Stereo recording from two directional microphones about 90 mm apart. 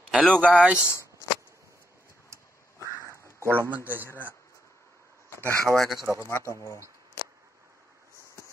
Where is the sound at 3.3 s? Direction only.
30° right (ahead or behind).